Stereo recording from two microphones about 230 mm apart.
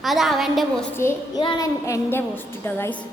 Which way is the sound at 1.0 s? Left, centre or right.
Centre.